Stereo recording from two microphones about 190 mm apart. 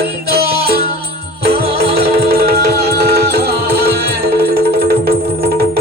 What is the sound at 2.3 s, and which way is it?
Music, 55° right (ahead or behind).